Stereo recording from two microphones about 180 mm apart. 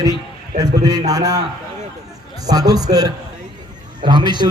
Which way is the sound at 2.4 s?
20° right (ahead or behind).